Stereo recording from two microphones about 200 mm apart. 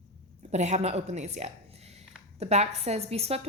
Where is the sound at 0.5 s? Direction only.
35° right (ahead or behind).